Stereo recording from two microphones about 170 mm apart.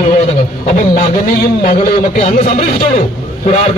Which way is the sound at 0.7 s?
55° left (ahead or behind).